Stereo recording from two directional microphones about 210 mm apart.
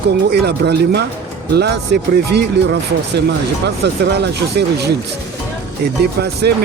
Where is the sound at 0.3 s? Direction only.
50° right (ahead or behind).